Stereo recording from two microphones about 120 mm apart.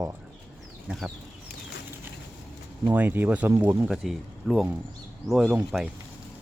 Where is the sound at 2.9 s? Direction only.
15° right (ahead or behind).